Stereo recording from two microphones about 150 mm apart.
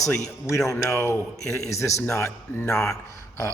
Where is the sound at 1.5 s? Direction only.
20° left (ahead or behind).